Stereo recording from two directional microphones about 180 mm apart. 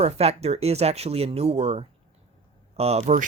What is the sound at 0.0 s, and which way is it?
Speech, 35° right (ahead or behind).